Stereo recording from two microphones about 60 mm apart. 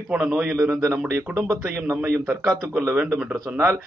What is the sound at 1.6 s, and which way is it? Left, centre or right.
Speech, right.